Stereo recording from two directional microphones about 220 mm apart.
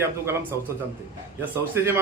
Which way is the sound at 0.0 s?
10° right (ahead or behind).